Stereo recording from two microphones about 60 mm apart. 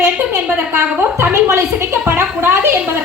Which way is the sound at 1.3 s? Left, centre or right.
Right.